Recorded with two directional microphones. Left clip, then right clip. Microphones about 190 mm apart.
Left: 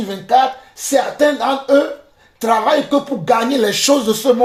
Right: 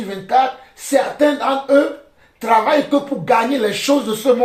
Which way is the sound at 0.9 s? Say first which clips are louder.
Left 1 dB; 40° left (ahead or behind).